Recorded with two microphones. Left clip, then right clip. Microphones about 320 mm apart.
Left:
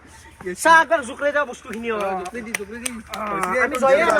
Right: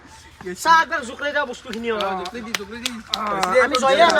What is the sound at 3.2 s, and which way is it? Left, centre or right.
Speech, centre.